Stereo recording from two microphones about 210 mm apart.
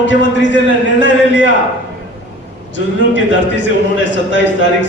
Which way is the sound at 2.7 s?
60° left (ahead or behind).